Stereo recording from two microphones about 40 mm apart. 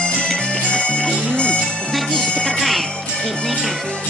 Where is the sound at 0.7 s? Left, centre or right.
Left.